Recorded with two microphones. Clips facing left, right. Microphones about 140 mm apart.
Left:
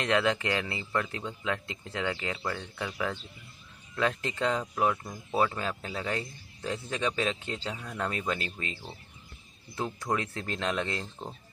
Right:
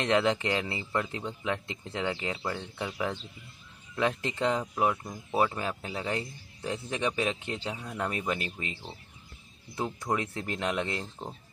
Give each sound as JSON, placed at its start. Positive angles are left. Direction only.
{"t": 0.0, "sound": "speech", "side_deg": -20}